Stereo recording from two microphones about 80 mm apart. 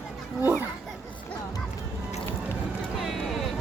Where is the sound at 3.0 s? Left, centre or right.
Centre.